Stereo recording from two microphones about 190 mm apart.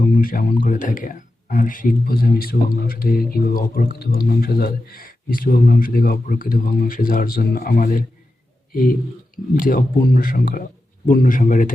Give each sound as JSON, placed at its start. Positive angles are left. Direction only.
{"t": 0.0, "sound": "speech", "side_deg": 45}